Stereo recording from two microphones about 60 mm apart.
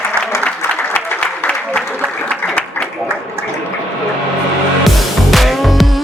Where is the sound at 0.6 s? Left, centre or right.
Left.